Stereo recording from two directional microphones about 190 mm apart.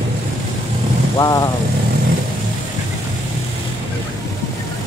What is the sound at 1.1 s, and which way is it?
Speech, 20° left (ahead or behind).